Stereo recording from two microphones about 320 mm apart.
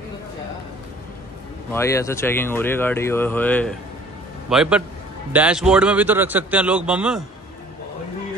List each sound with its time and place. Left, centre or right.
1.7 s speech: centre